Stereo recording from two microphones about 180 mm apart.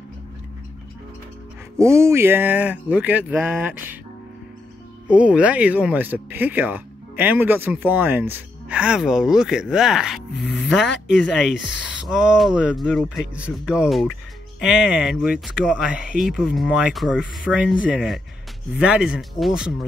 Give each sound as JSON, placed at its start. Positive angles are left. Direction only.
{"t": 1.8, "sound": "speech", "side_deg": -15}
{"t": 5.0, "sound": "speech", "side_deg": -5}
{"t": 11.5, "sound": "speech", "side_deg": 80}
{"t": 11.8, "sound": "speech", "side_deg": -5}